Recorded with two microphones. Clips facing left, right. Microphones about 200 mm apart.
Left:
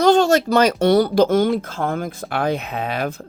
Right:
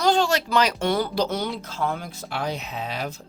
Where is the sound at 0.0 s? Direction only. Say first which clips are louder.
Left 7 dB; 45° left (ahead or behind).